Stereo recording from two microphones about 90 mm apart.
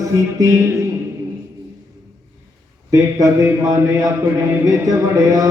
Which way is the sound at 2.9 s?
35° right (ahead or behind).